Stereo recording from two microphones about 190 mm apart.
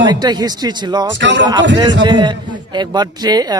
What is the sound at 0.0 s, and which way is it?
A man's voice, 20° right (ahead or behind).